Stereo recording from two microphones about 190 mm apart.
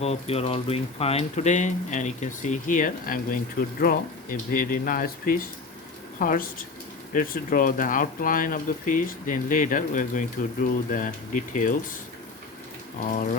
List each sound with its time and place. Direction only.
0.0 s speech: 35° left (ahead or behind)
13.1 s speech: 45° left (ahead or behind)